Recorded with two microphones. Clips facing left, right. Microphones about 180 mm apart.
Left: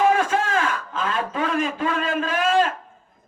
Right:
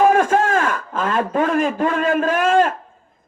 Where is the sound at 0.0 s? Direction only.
50° right (ahead or behind).